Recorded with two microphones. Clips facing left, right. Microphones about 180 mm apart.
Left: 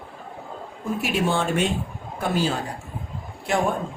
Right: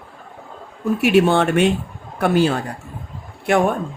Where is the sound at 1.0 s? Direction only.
65° right (ahead or behind).